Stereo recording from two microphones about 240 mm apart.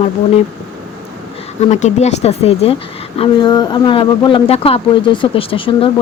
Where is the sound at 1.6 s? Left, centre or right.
Left.